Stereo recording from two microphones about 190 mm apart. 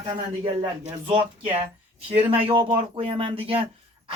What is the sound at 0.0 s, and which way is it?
Speech, 30° right (ahead or behind).